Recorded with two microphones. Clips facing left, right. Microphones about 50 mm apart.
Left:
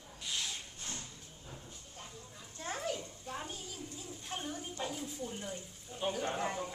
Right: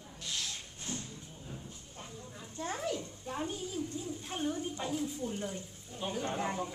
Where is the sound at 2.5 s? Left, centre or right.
Right.